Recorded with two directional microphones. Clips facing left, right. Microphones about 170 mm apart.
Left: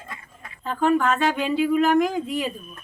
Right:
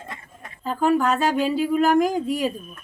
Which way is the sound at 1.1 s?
40° right (ahead or behind).